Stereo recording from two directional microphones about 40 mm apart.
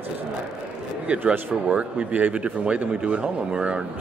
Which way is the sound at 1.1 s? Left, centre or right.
Right.